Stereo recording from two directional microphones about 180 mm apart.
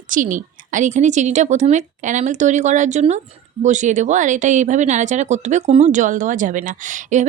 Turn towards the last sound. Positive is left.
turn(degrees=-45)  # may be behind; listen again after turning